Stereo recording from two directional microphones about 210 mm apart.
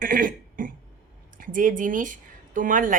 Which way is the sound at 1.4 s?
40° right (ahead or behind).